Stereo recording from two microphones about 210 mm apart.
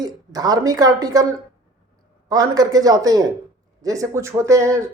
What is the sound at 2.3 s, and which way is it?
Speech, 15° right (ahead or behind).